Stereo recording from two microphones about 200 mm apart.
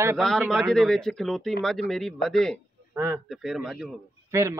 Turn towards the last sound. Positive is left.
turn(degrees=-15)  # may be behind; listen again after turning